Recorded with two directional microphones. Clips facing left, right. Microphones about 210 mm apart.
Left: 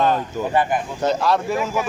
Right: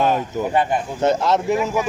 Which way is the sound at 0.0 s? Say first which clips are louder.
Right 1 dB; 10° right (ahead or behind).